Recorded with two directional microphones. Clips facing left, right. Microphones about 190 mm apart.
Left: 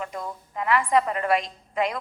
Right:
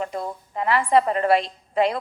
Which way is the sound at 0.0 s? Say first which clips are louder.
Right 4 dB; 30° right (ahead or behind).